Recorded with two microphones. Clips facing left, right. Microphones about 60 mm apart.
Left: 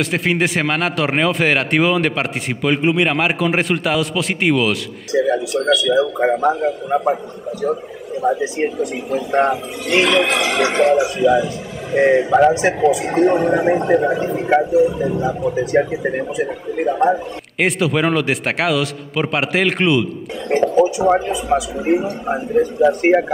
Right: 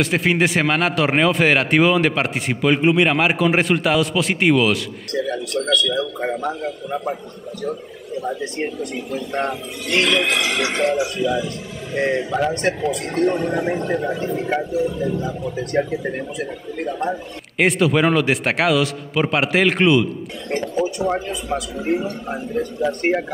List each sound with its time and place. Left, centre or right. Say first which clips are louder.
0.0 s speech: even; centre
5.2 s speech: left 5 dB; centre
17.6 s speech: right 1 dB; centre
20.4 s speech: left 8 dB; centre